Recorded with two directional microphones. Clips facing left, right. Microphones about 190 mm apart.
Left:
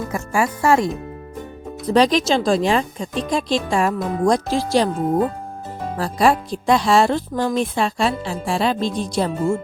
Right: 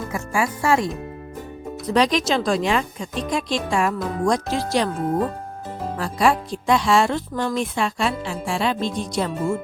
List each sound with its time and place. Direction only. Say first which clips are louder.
0.1 s speech: left 2 dB; 45° left (ahead or behind)
1.9 s a woman's voice: left 3 dB; 35° left (ahead or behind)
6.0 s a woman's voice: left 3 dB; 35° left (ahead or behind)